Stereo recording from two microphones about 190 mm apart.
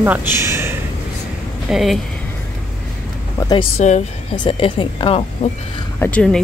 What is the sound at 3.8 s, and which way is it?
Speech, 40° left (ahead or behind).